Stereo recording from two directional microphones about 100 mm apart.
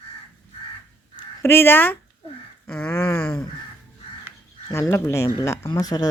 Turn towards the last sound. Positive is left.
turn(degrees=40)  # may be behind; listen again after turning